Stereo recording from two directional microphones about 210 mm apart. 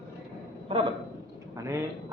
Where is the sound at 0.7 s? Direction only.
25° right (ahead or behind).